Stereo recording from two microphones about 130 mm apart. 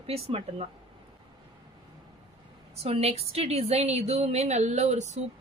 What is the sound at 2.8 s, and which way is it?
A woman's voice, 50° right (ahead or behind).